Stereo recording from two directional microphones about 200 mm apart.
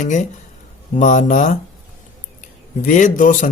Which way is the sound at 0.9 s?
40° left (ahead or behind).